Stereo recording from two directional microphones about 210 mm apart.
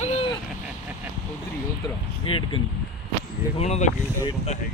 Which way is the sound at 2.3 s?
25° left (ahead or behind).